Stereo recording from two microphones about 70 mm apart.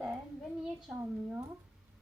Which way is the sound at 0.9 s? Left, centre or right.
Centre.